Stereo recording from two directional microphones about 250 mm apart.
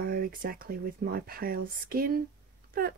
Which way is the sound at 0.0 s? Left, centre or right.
Right.